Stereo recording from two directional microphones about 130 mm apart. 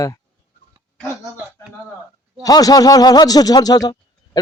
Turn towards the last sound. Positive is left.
turn(degrees=30)  # may be behind; listen again after turning